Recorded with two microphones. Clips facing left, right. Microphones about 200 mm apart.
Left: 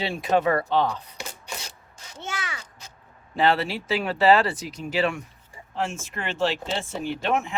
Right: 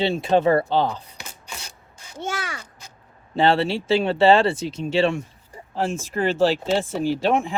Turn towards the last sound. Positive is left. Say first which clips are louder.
# right 5 dB
turn(degrees=-35)  # may be behind; listen again after turning